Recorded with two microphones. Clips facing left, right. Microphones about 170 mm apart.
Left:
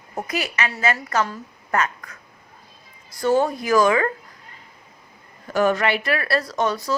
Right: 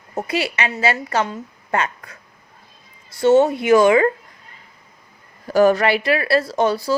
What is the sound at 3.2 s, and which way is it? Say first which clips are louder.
Speech: right 6 dB; 25° right (ahead or behind).